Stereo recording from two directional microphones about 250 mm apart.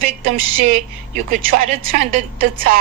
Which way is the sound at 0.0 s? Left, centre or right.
Right.